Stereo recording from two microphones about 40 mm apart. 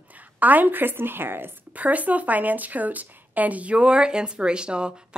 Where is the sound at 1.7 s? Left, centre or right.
Right.